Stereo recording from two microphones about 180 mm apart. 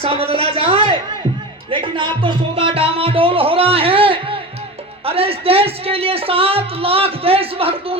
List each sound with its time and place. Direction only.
0.0 s a woman's voice: 30° right (ahead or behind)
1.7 s music: 25° right (ahead or behind)
5.0 s speech: 30° right (ahead or behind)